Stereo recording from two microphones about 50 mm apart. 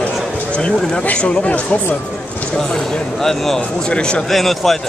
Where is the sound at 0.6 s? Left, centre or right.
Left.